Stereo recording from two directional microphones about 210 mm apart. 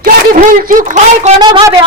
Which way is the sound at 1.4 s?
20° right (ahead or behind).